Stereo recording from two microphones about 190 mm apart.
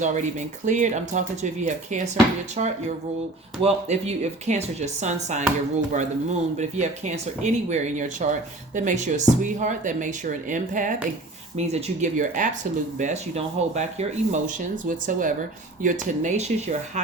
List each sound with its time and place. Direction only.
0.0 s speech: 40° right (ahead or behind)